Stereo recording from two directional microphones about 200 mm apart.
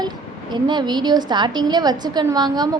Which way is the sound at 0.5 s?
20° right (ahead or behind).